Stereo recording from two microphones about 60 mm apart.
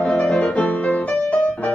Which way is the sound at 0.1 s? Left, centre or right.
Left.